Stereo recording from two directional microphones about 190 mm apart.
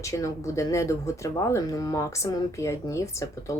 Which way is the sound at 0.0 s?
15° left (ahead or behind).